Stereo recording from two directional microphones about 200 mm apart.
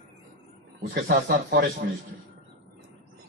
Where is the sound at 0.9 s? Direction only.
50° right (ahead or behind).